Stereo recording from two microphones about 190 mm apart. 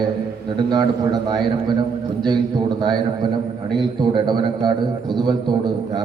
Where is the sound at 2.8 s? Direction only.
25° right (ahead or behind).